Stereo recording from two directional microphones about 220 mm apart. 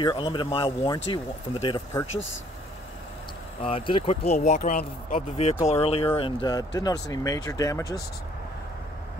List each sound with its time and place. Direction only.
0.0 s speech: 20° left (ahead or behind)
3.6 s speech: 25° left (ahead or behind)